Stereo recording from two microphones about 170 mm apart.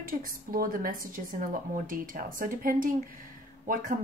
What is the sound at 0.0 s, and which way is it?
A woman's voice, 55° right (ahead or behind).